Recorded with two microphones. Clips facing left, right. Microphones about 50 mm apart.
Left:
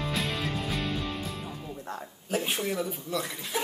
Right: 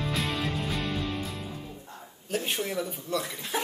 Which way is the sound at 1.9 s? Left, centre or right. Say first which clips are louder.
Left 8 dB; left.